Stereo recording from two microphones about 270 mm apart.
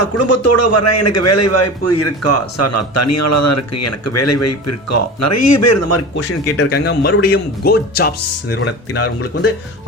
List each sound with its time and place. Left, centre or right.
0.0 s a man's voice: left
6.6 s speech: left